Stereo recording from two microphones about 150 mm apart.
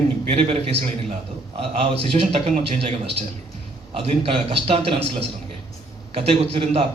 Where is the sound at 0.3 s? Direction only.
40° right (ahead or behind).